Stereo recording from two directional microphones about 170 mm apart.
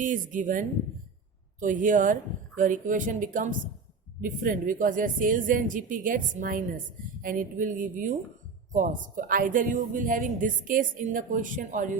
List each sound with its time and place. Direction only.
0.0 s a woman's voice: 50° right (ahead or behind)